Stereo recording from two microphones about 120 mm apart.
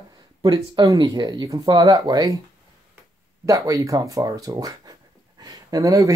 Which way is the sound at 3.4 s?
30° right (ahead or behind).